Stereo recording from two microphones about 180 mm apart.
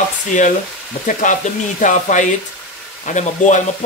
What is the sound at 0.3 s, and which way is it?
Speech, 45° left (ahead or behind).